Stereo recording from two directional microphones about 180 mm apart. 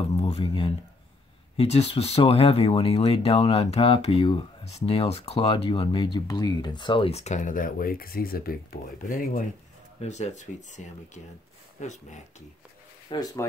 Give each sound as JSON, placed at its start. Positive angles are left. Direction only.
{"t": 0.1, "sound": "speech", "side_deg": 30}
{"t": 13.1, "sound": "speech", "side_deg": 20}